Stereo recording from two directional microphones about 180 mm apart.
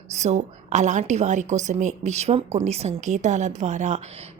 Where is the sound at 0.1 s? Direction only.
40° right (ahead or behind).